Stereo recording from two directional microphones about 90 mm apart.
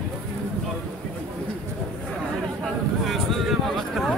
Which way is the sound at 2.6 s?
Centre (ahead or behind).